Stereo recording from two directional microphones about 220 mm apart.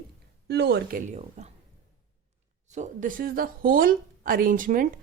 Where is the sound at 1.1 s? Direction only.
30° right (ahead or behind).